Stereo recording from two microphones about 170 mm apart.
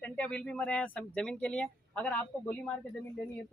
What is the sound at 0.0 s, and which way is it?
Speech, 5° left (ahead or behind).